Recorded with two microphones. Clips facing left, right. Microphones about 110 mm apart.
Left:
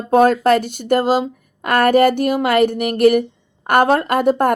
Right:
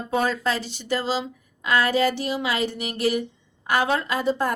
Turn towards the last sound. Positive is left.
turn(degrees=55)  # may be behind; listen again after turning